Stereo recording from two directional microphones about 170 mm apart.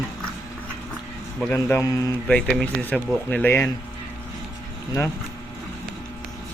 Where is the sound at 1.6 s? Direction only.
15° left (ahead or behind).